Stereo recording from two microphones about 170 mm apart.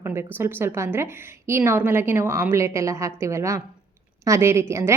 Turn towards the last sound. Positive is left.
turn(degrees=-15)  # may be behind; listen again after turning